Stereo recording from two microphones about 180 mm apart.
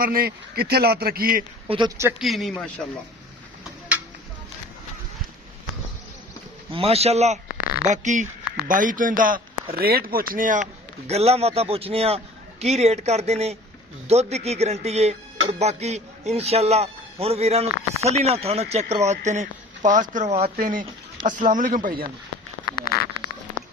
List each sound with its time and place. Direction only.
0.0 s a man's voice: 55° right (ahead or behind)
1.6 s speech: 30° right (ahead or behind)
2.0 s a man's voice: 10° right (ahead or behind)
2.2 s a man's voice: centre (ahead or behind)
6.7 s a man's voice: 30° right (ahead or behind); by 22.0 s 50° right (ahead or behind)
22.7 s a sound: 55° left (ahead or behind)